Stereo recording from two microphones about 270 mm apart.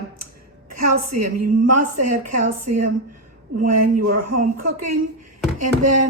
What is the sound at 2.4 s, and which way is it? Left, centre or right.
Speech, right.